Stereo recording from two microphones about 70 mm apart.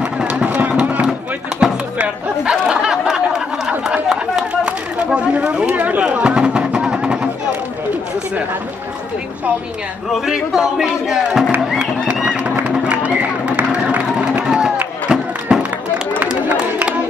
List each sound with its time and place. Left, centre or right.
0.0 s run: centre
2.0 s chatter: centre
10.1 s speech: centre
12.3 s music: centre
14.4 s a sound: centre
15.0 s music: centre
16.3 s chatter: centre